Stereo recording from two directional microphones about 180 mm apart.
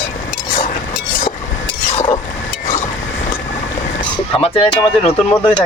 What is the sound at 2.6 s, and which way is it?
Vehicle, 40° left (ahead or behind).